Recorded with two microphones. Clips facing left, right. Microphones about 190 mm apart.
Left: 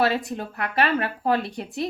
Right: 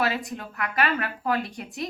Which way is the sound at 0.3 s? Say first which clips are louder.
Left 3 dB; 30° left (ahead or behind).